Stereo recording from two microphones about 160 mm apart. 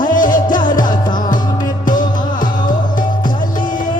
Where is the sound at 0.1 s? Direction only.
55° left (ahead or behind).